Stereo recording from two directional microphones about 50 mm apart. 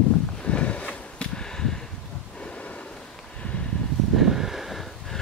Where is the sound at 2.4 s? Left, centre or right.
Left.